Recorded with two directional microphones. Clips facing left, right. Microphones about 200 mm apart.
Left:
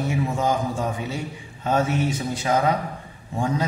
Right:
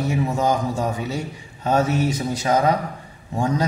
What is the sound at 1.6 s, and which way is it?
Speech, 40° right (ahead or behind).